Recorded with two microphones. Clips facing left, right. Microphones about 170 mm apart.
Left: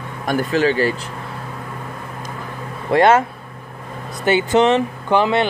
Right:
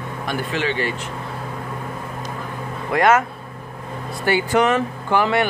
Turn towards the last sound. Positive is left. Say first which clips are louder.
# left 2 dB
turn(degrees=20)  # may be behind; listen again after turning